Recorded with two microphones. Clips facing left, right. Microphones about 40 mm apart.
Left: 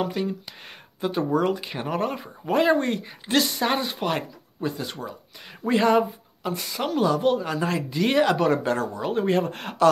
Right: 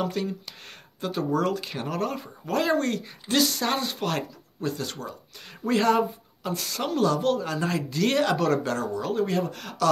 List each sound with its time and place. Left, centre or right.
0.0 s speech: centre; by 9.8 s left